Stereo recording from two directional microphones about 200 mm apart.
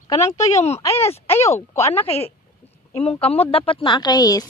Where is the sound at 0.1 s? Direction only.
15° left (ahead or behind).